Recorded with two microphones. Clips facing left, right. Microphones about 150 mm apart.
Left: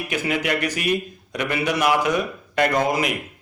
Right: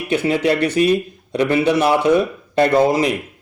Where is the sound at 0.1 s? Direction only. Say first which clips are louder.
Right 8 dB; 30° right (ahead or behind).